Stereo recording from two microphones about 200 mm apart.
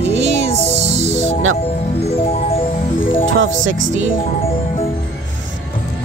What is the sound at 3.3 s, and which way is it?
Speech, 70° right (ahead or behind).